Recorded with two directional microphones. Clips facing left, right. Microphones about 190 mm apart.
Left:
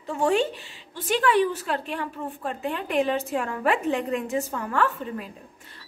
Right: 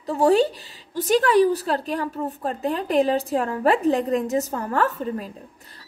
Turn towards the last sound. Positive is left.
turn(degrees=-40)  # may be behind; listen again after turning